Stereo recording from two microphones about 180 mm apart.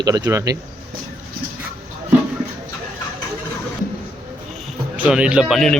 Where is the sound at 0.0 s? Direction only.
20° right (ahead or behind).